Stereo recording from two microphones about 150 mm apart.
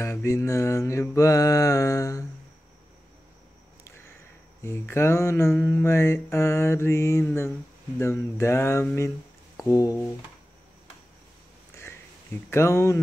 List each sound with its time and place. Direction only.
0.0 s mantra: 20° left (ahead or behind)
4.6 s mantra: 15° left (ahead or behind)
12.4 s mantra: 20° left (ahead or behind)